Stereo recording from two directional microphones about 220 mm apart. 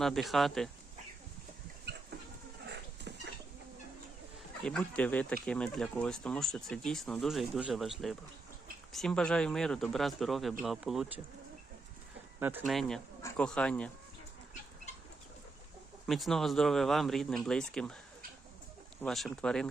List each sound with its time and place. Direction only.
0.0 s speech: centre (ahead or behind)
1.8 s a sound: 50° right (ahead or behind)
4.6 s speech: 5° left (ahead or behind)
12.4 s speech: 10° right (ahead or behind)
16.0 s speech: centre (ahead or behind)
19.0 s speech: centre (ahead or behind)